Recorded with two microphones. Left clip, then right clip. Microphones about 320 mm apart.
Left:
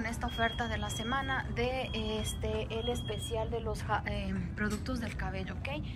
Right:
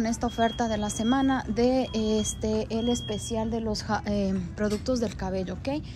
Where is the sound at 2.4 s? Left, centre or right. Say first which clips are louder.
Right 7 dB; right.